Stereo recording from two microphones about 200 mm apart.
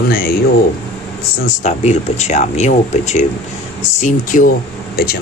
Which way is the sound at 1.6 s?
35° left (ahead or behind).